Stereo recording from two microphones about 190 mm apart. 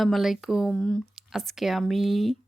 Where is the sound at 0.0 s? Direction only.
Centre (ahead or behind).